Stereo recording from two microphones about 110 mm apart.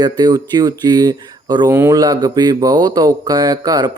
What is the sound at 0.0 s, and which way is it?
Speech, 40° right (ahead or behind).